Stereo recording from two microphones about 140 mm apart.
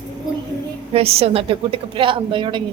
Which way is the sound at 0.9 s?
45° right (ahead or behind).